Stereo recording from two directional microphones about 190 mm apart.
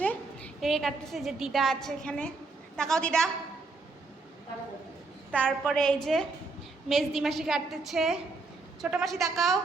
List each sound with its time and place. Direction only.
0.0 s a woman's voice: 5° left (ahead or behind)
5.3 s a woman's voice: 5° left (ahead or behind)